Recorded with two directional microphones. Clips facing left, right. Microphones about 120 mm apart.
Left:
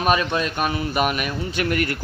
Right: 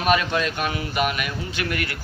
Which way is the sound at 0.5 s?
35° left (ahead or behind).